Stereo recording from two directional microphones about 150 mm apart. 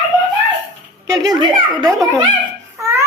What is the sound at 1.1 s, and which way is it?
Speech, 25° right (ahead or behind).